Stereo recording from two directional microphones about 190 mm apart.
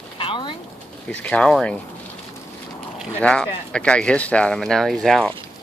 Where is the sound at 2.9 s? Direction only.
5° left (ahead or behind).